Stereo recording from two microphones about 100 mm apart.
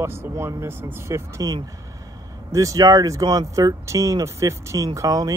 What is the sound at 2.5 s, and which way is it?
Speech, 35° right (ahead or behind).